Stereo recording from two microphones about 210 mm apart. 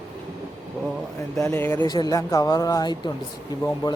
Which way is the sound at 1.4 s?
10° left (ahead or behind).